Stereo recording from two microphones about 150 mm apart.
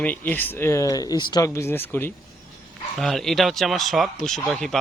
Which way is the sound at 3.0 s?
5° left (ahead or behind).